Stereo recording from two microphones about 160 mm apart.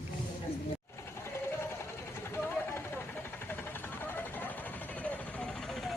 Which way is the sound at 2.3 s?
15° left (ahead or behind).